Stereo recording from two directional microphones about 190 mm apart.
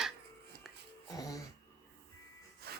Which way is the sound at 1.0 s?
20° left (ahead or behind).